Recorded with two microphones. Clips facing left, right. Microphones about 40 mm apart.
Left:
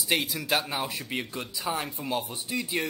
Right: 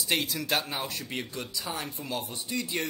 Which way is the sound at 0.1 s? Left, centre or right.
Centre.